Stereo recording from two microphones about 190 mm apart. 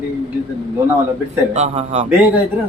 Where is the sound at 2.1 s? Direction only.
10° right (ahead or behind).